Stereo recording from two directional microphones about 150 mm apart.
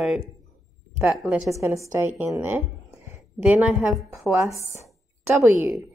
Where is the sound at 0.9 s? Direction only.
5° right (ahead or behind).